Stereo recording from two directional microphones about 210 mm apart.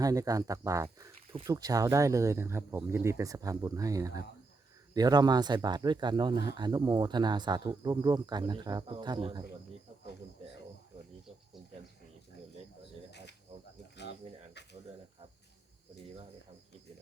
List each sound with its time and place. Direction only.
0.0 s speech: 15° right (ahead or behind)
13.1 s cricket: 55° left (ahead or behind)